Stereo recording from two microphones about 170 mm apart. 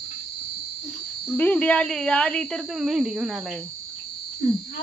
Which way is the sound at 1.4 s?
10° left (ahead or behind).